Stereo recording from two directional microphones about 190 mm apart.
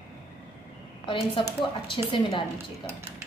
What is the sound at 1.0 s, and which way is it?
Speech, 25° left (ahead or behind).